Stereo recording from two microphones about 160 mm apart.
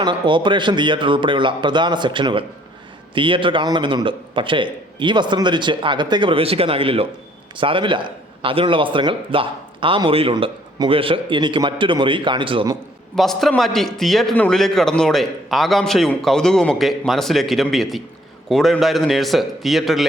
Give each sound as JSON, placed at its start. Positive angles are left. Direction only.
{"t": 0.0, "sound": "a man's voice", "side_deg": -30}
{"t": 13.1, "sound": "a man's voice", "side_deg": 0}